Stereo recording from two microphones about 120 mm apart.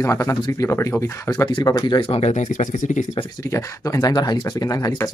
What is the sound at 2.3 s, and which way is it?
Speech, 90° left.